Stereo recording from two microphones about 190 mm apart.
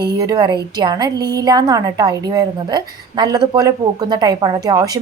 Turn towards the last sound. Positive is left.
turn(degrees=-20)  # may be behind; listen again after turning